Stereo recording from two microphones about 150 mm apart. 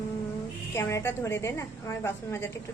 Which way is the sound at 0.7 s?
20° left (ahead or behind).